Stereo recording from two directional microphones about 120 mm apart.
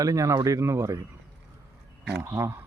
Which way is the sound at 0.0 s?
25° right (ahead or behind).